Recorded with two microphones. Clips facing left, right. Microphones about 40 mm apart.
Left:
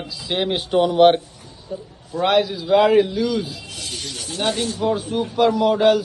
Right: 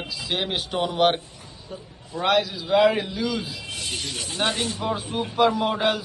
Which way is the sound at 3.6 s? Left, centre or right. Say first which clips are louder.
Right 1 dB; right.